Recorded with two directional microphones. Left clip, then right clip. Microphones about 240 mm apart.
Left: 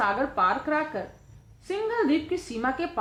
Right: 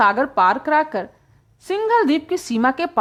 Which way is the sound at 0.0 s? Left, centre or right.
Right.